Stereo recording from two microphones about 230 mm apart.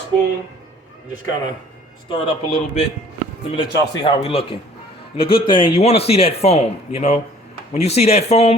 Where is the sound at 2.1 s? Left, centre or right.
Left.